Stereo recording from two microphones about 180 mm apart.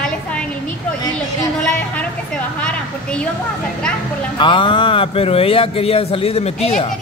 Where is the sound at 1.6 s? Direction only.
5° left (ahead or behind).